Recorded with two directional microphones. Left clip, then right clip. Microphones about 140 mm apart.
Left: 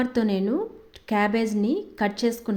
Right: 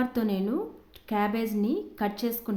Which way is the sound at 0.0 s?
20° left (ahead or behind).